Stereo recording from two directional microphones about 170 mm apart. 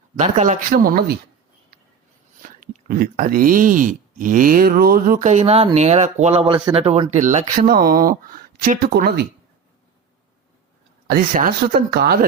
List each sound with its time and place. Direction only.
0.2 s speech: 45° right (ahead or behind); by 1.1 s 60° right (ahead or behind)
2.4 s speech: 55° right (ahead or behind)
11.1 s speech: 55° right (ahead or behind)